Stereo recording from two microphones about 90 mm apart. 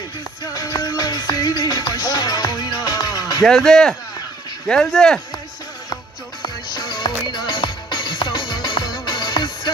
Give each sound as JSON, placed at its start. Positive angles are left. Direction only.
{"t": 0.5, "sound": "music", "side_deg": 40}
{"t": 3.4, "sound": "speech", "side_deg": 5}
{"t": 6.4, "sound": "music", "side_deg": 55}